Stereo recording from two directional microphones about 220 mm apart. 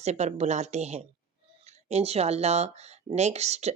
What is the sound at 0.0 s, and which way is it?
Speech, 30° right (ahead or behind).